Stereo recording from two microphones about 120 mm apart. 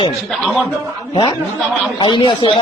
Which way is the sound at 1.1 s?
40° left (ahead or behind).